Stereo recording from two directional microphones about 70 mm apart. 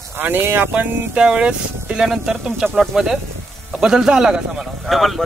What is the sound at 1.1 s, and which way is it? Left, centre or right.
Speech, centre.